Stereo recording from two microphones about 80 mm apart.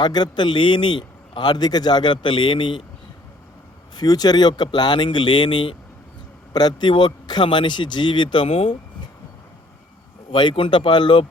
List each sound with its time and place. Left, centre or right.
0.0 s a man's voice: left
3.9 s a man's voice: left
6.5 s a man's voice: left
10.3 s speech: left